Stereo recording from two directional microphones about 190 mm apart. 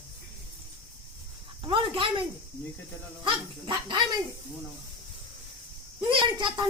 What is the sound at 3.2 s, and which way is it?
Speech, 25° right (ahead or behind).